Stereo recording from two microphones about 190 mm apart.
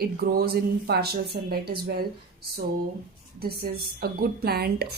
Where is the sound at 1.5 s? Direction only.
55° right (ahead or behind).